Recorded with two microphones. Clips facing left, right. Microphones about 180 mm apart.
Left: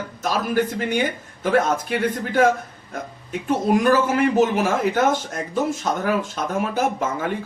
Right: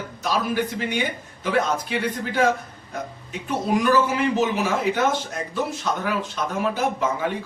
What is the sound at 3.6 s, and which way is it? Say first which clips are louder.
Speech: left 1 dB; 50° left (ahead or behind).